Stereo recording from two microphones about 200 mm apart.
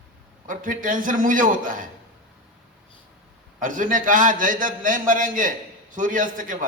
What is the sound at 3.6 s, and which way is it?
A man's voice, 40° right (ahead or behind).